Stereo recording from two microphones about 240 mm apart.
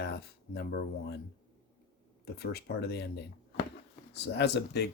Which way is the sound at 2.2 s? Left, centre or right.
Left.